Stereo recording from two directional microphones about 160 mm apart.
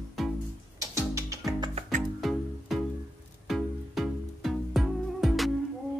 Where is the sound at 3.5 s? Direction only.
Centre (ahead or behind).